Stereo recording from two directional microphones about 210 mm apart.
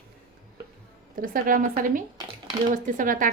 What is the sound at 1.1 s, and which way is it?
A woman's voice, 40° right (ahead or behind).